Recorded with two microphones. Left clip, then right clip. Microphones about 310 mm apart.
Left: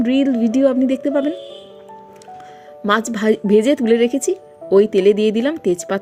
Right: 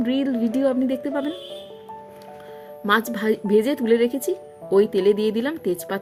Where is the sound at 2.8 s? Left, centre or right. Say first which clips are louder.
Left 4 dB; centre.